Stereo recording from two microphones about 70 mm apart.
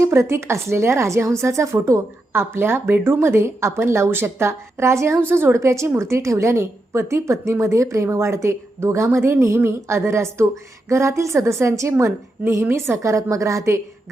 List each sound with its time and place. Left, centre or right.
0.0 s a woman's voice: right